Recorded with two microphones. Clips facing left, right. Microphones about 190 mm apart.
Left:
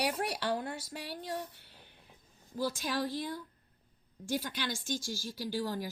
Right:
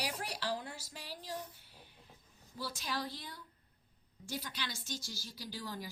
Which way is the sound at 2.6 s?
50° left (ahead or behind).